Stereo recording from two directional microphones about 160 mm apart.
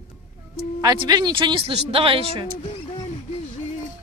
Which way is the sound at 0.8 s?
25° right (ahead or behind).